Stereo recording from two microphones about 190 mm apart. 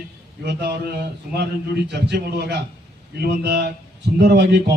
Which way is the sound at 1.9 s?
65° right (ahead or behind).